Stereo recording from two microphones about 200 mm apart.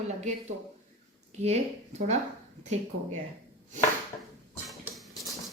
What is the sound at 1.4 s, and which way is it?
Speech, 35° right (ahead or behind).